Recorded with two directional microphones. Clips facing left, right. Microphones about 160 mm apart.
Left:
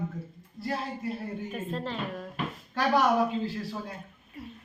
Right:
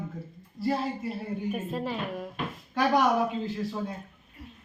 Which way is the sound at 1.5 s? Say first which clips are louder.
Right 2 dB; 10° right (ahead or behind).